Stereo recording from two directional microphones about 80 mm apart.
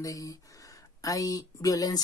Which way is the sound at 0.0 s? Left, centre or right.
Left.